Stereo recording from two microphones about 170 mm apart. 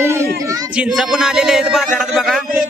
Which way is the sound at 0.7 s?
5° right (ahead or behind).